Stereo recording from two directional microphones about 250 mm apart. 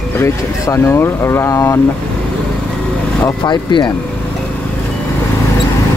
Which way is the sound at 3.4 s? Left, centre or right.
Centre.